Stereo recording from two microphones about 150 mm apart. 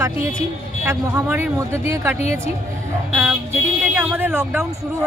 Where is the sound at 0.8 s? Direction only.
15° right (ahead or behind).